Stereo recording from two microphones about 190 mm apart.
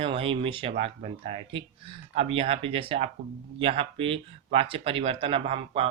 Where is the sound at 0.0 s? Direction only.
30° right (ahead or behind).